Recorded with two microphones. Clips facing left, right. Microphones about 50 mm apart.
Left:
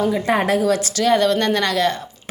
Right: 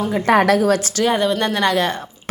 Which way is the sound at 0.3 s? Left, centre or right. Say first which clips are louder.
Right 7 dB; right.